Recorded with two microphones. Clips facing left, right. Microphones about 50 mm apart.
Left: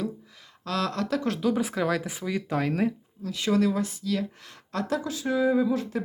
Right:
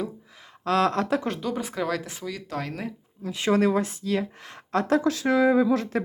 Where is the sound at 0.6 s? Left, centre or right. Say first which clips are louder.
Right 6 dB; right.